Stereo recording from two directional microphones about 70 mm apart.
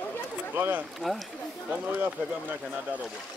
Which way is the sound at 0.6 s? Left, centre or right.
Right.